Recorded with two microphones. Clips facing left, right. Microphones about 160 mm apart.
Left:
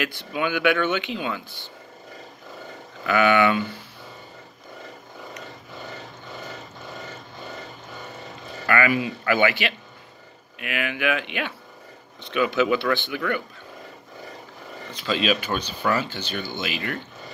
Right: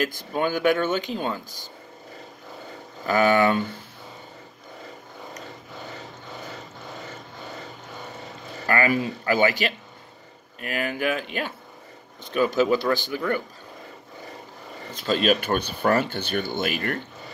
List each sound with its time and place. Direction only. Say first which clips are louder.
0.0 s speech: right 2 dB; 45° right (ahead or behind)
3.1 s speech: even; 40° right (ahead or behind)
8.6 s speech: even; 35° right (ahead or behind)
15.0 s speech: right 2 dB; 50° right (ahead or behind)